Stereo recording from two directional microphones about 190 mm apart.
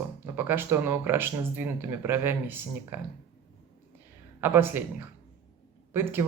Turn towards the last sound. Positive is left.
turn(degrees=-10)  # may be behind; listen again after turning